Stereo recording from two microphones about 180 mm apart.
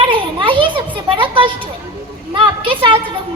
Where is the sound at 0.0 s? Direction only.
30° right (ahead or behind).